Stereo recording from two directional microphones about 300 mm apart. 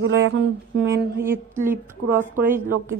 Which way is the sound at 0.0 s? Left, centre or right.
Right.